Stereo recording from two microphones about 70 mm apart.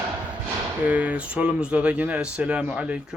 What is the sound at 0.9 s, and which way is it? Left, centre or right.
Speech, centre.